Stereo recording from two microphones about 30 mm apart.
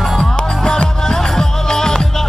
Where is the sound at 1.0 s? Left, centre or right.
Centre.